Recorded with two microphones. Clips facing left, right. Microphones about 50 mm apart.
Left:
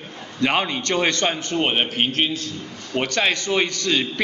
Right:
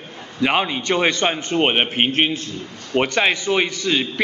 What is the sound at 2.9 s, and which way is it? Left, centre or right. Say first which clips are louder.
A man's voice: right 3 dB; centre.